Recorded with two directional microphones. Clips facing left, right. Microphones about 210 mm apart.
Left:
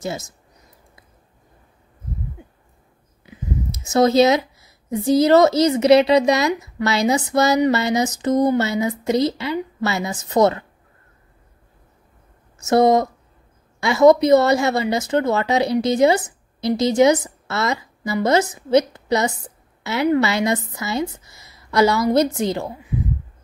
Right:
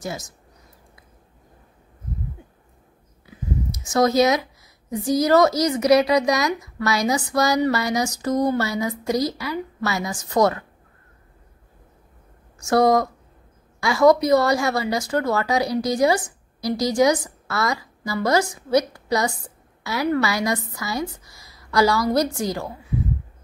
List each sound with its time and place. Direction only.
0.0 s a woman's voice: 25° left (ahead or behind)
3.3 s speech: 25° left (ahead or behind)
12.6 s a woman's voice: 25° left (ahead or behind)